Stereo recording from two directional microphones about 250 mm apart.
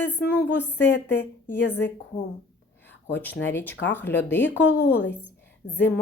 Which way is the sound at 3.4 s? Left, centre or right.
Centre.